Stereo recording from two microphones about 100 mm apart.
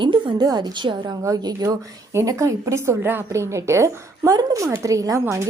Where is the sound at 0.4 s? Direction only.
45° right (ahead or behind).